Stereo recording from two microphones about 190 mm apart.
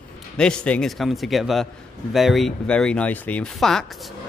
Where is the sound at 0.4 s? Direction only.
5° left (ahead or behind).